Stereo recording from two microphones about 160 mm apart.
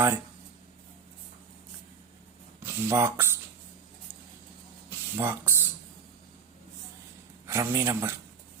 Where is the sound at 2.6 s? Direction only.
15° right (ahead or behind).